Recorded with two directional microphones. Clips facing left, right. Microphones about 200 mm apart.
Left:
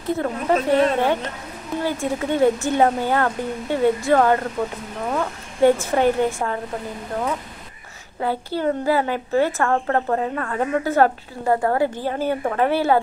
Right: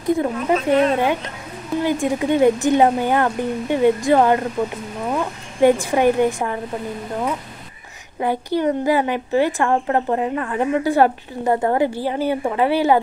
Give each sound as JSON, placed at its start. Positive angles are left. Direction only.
{"t": 0.0, "sound": "a woman's voice", "side_deg": -15}
{"t": 8.2, "sound": "a woman's voice", "side_deg": -15}